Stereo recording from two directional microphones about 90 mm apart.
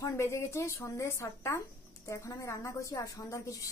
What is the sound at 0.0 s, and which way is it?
A woman's voice, 30° left (ahead or behind).